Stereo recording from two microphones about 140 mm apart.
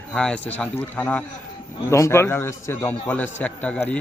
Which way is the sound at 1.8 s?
20° left (ahead or behind).